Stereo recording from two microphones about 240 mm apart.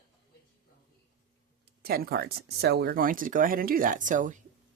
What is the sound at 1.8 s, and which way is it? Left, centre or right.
Speech, right.